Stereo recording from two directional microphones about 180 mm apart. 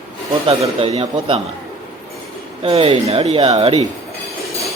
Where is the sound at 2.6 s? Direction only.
30° right (ahead or behind).